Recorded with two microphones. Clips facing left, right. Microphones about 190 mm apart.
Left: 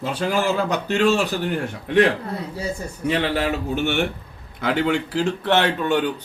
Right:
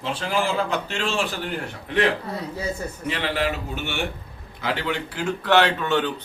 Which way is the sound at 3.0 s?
45° left (ahead or behind).